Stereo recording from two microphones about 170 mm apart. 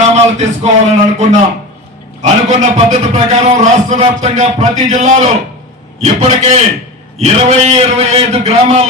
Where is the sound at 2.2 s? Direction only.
40° right (ahead or behind).